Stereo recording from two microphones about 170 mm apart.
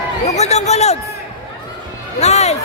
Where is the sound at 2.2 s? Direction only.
40° left (ahead or behind).